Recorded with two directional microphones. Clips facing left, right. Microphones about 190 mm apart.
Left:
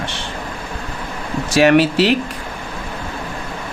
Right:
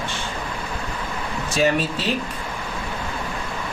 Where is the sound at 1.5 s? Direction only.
80° left.